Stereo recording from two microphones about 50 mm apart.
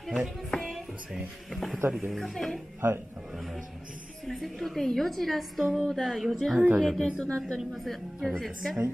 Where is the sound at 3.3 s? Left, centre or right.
Centre.